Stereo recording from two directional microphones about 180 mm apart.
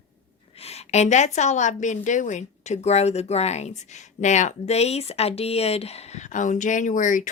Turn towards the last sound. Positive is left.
turn(degrees=45)  # may be behind; listen again after turning